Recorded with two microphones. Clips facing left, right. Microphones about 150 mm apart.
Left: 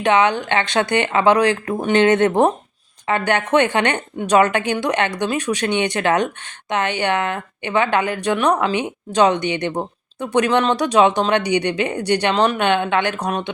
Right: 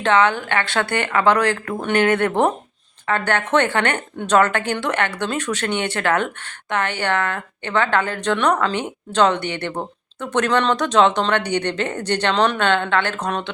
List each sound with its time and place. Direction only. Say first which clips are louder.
0.0 s a woman's voice: left 1 dB; 15° left (ahead or behind)